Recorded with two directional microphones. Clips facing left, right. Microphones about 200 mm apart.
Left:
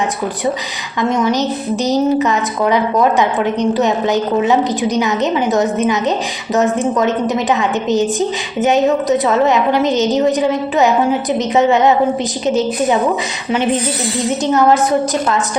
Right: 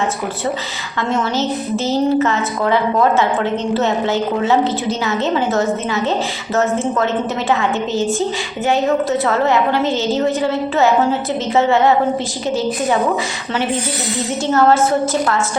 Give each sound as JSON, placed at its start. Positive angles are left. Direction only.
{"t": 1.1, "sound": "a woman's voice", "side_deg": 15}
{"t": 14.3, "sound": "a woman's voice", "side_deg": 20}